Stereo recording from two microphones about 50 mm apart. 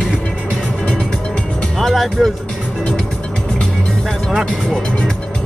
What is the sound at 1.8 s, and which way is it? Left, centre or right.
Speech, centre.